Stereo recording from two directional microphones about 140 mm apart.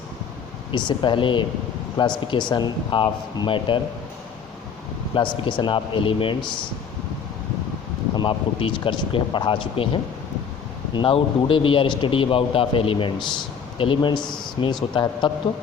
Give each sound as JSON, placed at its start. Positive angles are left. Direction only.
{"t": 0.7, "sound": "speech", "side_deg": 35}
{"t": 5.1, "sound": "speech", "side_deg": 35}
{"t": 8.1, "sound": "speech", "side_deg": 35}